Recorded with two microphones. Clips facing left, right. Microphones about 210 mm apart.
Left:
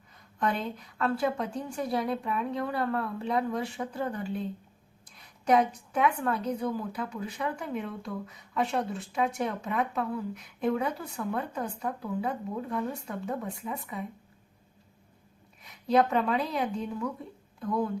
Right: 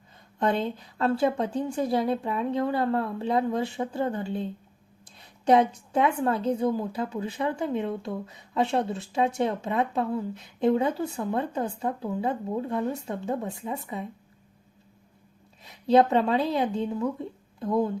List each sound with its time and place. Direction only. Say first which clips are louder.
0.3 s a woman's voice: right 5 dB; 25° right (ahead or behind)
15.6 s speech: right 5 dB; 25° right (ahead or behind)